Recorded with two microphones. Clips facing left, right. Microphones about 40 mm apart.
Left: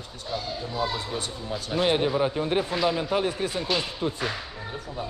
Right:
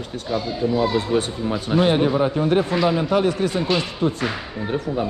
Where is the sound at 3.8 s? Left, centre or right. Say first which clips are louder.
Right 6 dB; right.